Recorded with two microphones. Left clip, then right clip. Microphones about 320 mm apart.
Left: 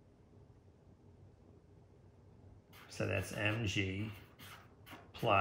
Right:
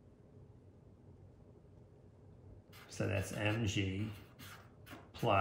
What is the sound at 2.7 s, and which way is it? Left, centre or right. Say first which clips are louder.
Writing: left 1 dB; centre.